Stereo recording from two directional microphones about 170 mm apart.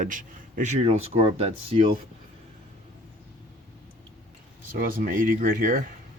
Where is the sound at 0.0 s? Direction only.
50° right (ahead or behind); by 2.0 s 35° right (ahead or behind).